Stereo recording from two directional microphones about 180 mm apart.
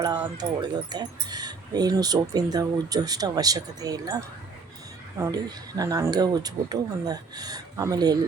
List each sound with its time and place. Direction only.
0.3 s speech: 25° right (ahead or behind)
5.2 s speech: 20° right (ahead or behind)